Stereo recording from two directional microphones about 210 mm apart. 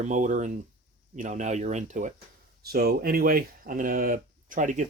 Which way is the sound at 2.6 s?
45° right (ahead or behind).